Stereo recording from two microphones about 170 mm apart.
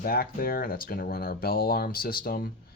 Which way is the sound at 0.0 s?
60° left (ahead or behind).